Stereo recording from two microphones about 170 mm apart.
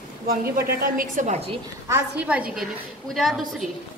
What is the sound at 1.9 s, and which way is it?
A woman's voice, 10° right (ahead or behind).